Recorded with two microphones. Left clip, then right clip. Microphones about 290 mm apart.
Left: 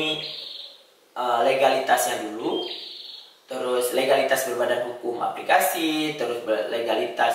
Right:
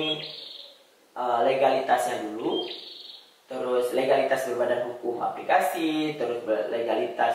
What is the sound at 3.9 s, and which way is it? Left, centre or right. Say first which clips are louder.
A man's voice: left 4 dB; centre.